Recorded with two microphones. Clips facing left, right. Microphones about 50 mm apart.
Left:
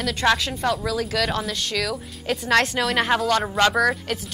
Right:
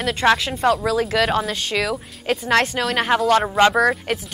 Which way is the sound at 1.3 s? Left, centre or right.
Centre.